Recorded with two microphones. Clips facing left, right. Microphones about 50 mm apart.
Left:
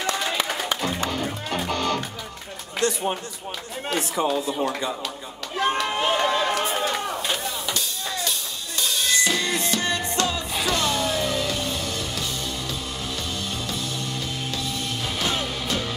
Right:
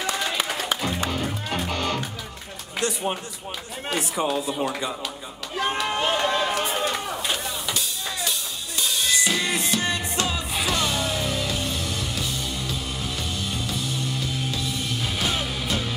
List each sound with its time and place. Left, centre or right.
0.0 s music: centre
2.8 s speech: centre
3.9 s speech: centre
5.6 s a sound: centre
9.2 s music: centre
15.1 s music: centre